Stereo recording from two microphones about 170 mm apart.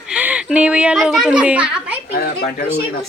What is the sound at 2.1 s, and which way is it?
Speech, 65° left (ahead or behind).